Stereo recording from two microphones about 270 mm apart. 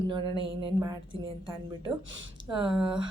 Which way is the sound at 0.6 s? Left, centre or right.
Centre.